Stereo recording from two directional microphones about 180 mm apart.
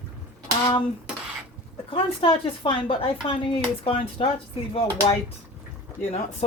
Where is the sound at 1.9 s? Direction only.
30° left (ahead or behind).